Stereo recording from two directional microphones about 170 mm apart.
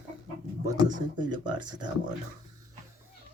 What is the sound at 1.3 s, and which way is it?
Speech, 25° right (ahead or behind).